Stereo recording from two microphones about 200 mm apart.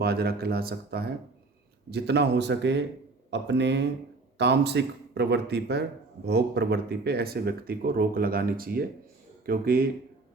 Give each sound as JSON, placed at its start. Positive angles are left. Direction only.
{"t": 0.0, "sound": "speech", "side_deg": -50}